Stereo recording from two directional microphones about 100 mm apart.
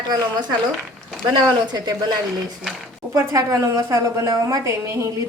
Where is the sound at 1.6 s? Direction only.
40° right (ahead or behind).